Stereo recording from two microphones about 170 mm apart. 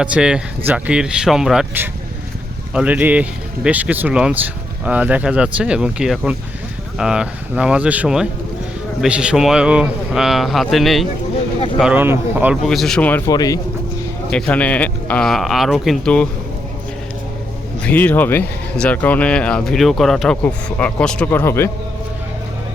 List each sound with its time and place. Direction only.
0.0 s a man's voice: 5° right (ahead or behind)
12.6 s a man's voice: centre (ahead or behind)
13.3 s speech: 20° left (ahead or behind)
14.3 s a man's voice: 5° left (ahead or behind)
17.8 s speech: 10° left (ahead or behind)